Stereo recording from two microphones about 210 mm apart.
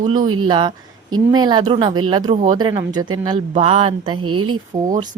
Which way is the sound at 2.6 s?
20° right (ahead or behind).